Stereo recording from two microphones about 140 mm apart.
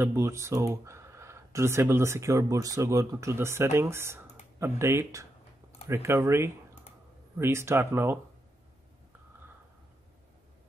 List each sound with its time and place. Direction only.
0.0 s speech: 20° right (ahead or behind)